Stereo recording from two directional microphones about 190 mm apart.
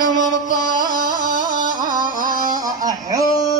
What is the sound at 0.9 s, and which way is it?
Carnatic music, 45° right (ahead or behind).